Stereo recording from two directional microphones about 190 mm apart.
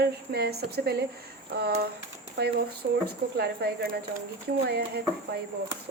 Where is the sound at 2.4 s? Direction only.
55° right (ahead or behind).